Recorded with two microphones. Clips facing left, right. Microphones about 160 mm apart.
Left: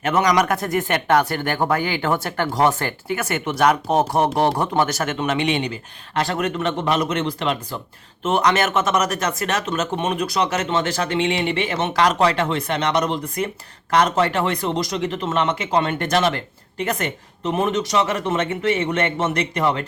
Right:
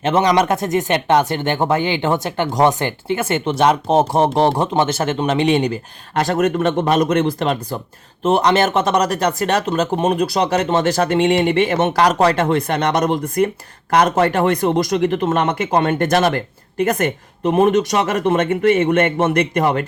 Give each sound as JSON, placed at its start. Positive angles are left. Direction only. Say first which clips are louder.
{"t": 0.0, "sound": "speech", "louder": "right 3 dB", "side_deg": -25}